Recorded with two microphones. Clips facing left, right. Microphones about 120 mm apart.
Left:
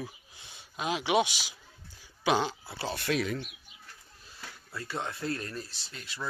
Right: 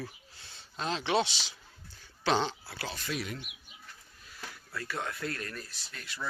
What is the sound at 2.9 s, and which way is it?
Speech, 65° left (ahead or behind).